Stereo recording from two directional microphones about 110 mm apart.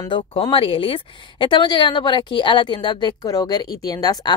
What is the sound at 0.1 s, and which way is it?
Speech, 50° left (ahead or behind).